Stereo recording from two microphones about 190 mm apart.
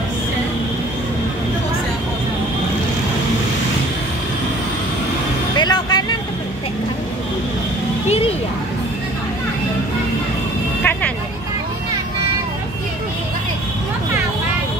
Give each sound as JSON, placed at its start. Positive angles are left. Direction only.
{"t": 5.6, "sound": "vehicle", "side_deg": 20}
{"t": 10.8, "sound": "vehicle", "side_deg": 10}